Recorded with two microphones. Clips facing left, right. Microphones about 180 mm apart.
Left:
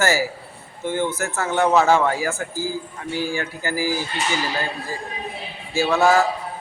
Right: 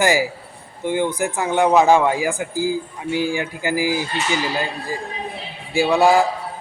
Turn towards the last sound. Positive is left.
turn(degrees=-15)  # may be behind; listen again after turning